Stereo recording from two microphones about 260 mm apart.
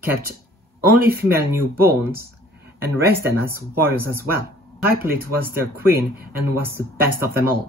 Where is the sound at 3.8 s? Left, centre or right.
Centre.